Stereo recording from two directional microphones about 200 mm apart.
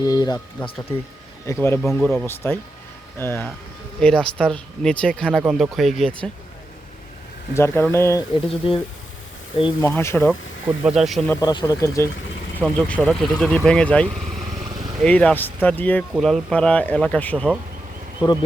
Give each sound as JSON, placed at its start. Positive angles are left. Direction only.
{"t": 0.0, "sound": "speech", "side_deg": 20}
{"t": 1.8, "sound": "speech", "side_deg": 0}
{"t": 7.5, "sound": "speech", "side_deg": 15}
{"t": 8.4, "sound": "speech", "side_deg": 25}
{"t": 9.8, "sound": "speech", "side_deg": 15}
{"t": 10.8, "sound": "speech", "side_deg": 0}
{"t": 11.3, "sound": "speech", "side_deg": 20}
{"t": 18.2, "sound": "speech", "side_deg": 25}